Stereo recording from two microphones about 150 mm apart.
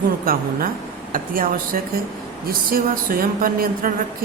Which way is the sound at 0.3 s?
75° right (ahead or behind).